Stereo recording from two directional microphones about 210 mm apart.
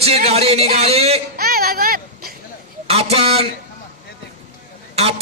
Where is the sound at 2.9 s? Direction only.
30° right (ahead or behind).